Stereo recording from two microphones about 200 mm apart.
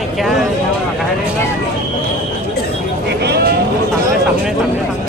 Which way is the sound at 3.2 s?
55° right (ahead or behind).